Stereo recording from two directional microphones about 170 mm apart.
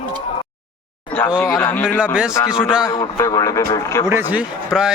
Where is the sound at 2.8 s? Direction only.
20° left (ahead or behind).